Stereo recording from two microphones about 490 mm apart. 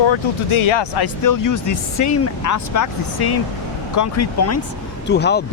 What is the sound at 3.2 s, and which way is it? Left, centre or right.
Speech, left.